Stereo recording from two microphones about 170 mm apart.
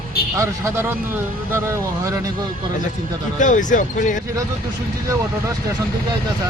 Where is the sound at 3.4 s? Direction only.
50° left (ahead or behind).